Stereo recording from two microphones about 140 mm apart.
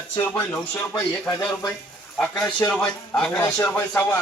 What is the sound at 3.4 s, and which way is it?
Speech, 15° left (ahead or behind).